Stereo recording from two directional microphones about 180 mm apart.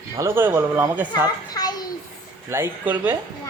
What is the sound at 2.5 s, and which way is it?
Speech, 10° right (ahead or behind).